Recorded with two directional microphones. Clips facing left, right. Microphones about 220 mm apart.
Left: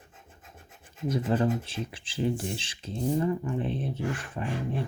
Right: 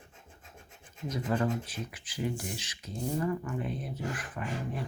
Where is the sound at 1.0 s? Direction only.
30° left (ahead or behind).